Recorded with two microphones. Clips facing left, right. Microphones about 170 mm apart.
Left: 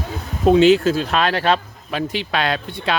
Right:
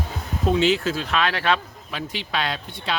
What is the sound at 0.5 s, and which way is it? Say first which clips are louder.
Speech: left 8 dB; 45° left (ahead or behind).